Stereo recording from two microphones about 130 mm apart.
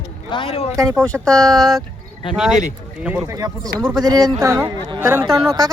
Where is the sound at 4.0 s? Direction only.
30° right (ahead or behind).